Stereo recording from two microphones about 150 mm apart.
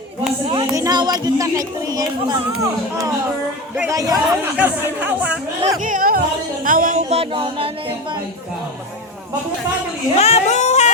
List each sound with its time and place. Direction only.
0.4 s music: 35° right (ahead or behind)
0.7 s speech: 25° right (ahead or behind)
3.8 s speech: 25° right (ahead or behind)
5.8 s speech: 65° right (ahead or behind)
6.7 s music: 65° right (ahead or behind)
7.1 s music: 40° right (ahead or behind)
10.2 s a sound: 45° left (ahead or behind)